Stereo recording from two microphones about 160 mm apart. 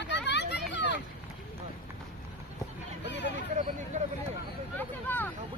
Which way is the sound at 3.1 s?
90° left.